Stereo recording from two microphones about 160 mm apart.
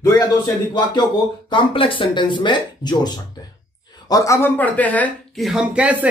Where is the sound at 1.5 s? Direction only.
30° left (ahead or behind).